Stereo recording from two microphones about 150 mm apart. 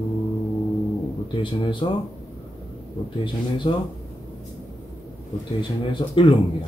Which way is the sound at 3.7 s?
35° left (ahead or behind).